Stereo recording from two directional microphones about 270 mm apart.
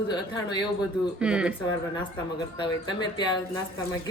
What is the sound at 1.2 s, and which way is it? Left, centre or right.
Speech, centre.